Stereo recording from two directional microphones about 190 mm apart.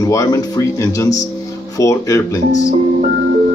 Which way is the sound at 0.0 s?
15° left (ahead or behind).